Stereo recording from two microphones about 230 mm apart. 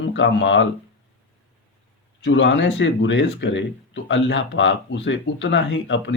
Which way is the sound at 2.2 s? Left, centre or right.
Left.